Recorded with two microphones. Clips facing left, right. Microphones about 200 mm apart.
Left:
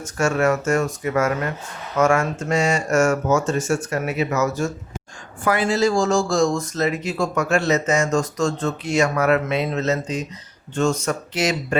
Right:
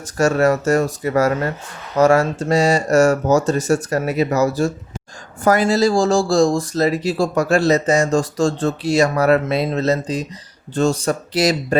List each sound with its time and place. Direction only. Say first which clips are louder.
0.0 s speech: right 4 dB; 35° right (ahead or behind)